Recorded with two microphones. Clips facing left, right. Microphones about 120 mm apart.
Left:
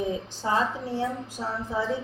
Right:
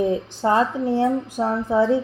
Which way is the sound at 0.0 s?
60° right (ahead or behind).